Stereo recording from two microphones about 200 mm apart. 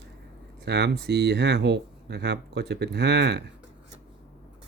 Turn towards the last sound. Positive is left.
turn(degrees=-60)  # may be behind; listen again after turning